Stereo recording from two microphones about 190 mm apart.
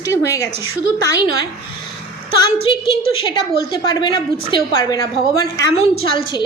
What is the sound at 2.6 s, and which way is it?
A woman's voice, 25° left (ahead or behind).